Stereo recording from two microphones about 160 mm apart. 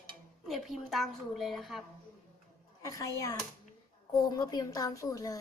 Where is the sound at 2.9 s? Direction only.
20° left (ahead or behind).